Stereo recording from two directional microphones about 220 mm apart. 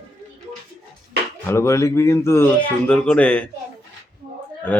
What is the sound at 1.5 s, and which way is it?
Speech, 10° left (ahead or behind).